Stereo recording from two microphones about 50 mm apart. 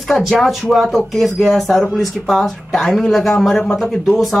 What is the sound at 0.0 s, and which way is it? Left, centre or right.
Speech, centre.